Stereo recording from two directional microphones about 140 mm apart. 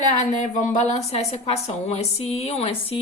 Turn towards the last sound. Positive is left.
turn(degrees=40)  # may be behind; listen again after turning